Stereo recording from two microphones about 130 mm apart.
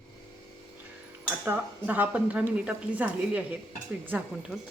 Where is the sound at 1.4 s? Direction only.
15° right (ahead or behind).